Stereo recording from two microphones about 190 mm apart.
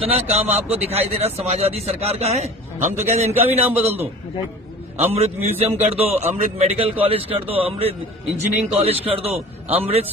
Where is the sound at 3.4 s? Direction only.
10° right (ahead or behind).